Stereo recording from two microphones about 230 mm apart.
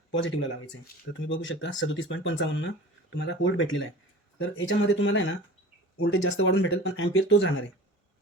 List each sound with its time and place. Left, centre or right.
0.2 s speech: left